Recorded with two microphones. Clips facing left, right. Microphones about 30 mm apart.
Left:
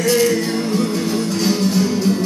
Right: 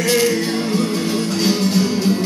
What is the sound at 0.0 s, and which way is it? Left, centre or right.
Music, centre.